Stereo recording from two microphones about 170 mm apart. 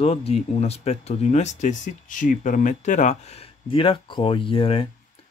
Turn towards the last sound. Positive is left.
turn(degrees=35)  # may be behind; listen again after turning